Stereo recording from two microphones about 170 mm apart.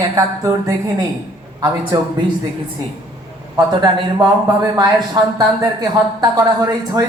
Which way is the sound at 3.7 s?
25° right (ahead or behind).